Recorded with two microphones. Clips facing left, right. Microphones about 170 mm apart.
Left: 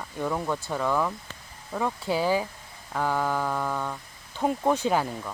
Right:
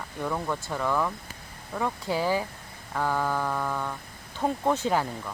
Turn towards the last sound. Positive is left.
turn(degrees=15)  # may be behind; listen again after turning